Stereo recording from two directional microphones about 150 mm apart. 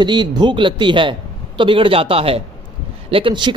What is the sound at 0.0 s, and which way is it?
A man's voice, 30° right (ahead or behind).